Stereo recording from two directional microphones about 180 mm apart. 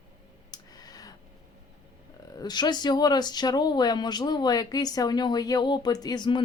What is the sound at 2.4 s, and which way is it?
Speech, 25° left (ahead or behind).